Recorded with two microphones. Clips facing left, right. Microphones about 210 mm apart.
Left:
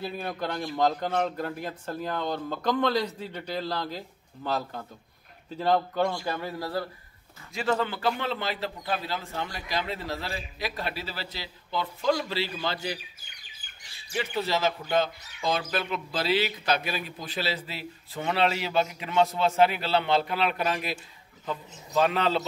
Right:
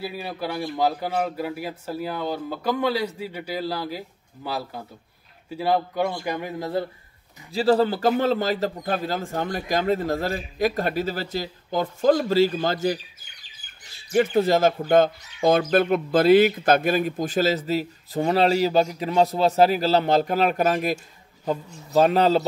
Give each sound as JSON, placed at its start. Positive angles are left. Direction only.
{"t": 0.0, "sound": "a man's voice", "side_deg": -5}
{"t": 7.5, "sound": "speech", "side_deg": -35}
{"t": 14.1, "sound": "speech", "side_deg": -50}